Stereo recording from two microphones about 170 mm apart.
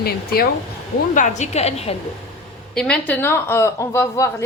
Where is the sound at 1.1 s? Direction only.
45° left (ahead or behind).